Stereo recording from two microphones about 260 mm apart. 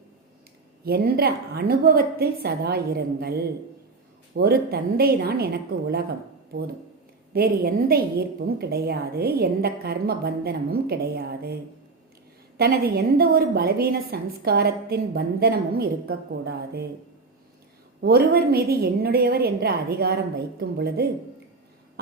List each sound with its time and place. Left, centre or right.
0.9 s a woman's voice: right
7.3 s a woman's voice: right
12.5 s a woman's voice: right
18.0 s a woman's voice: right